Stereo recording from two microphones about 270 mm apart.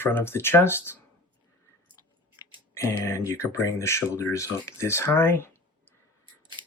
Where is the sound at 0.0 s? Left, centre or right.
Centre.